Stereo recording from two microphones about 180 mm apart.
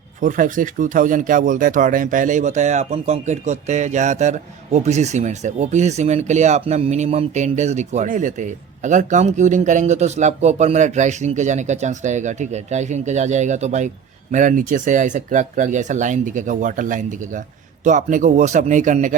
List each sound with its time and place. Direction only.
0.2 s speech: 45° right (ahead or behind)